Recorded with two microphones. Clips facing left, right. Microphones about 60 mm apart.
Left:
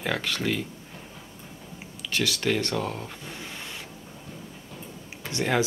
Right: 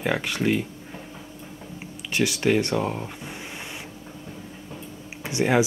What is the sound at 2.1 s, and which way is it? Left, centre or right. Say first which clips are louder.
Speech: right 4 dB; centre.